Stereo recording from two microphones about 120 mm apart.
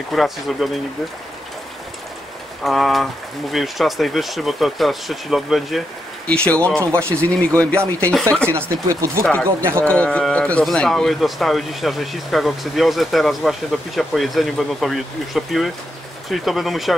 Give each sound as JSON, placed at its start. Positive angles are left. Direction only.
{"t": 0.1, "sound": "speech", "side_deg": 0}
{"t": 2.6, "sound": "speech", "side_deg": 0}
{"t": 6.8, "sound": "speech", "side_deg": -20}
{"t": 7.2, "sound": "speech", "side_deg": 10}
{"t": 8.5, "sound": "speech", "side_deg": -20}
{"t": 9.2, "sound": "speech", "side_deg": 10}